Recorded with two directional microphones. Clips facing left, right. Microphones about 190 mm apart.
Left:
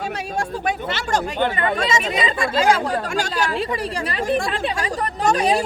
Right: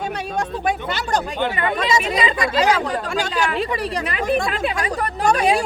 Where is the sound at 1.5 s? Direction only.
30° left (ahead or behind).